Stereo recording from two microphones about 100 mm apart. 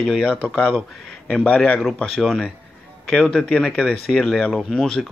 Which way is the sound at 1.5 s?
15° left (ahead or behind).